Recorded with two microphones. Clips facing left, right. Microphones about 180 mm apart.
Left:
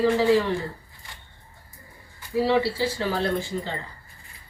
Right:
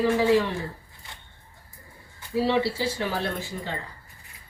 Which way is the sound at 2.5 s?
20° right (ahead or behind).